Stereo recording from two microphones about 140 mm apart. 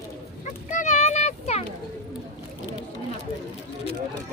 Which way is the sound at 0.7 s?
60° left (ahead or behind).